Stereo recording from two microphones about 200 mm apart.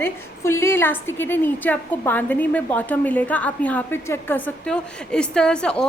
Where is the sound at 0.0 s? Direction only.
15° left (ahead or behind).